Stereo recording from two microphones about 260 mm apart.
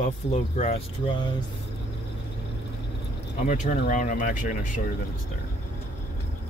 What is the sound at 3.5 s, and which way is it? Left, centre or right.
Speech, left.